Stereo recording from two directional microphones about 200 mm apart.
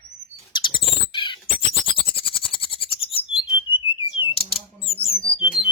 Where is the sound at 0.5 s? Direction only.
25° left (ahead or behind).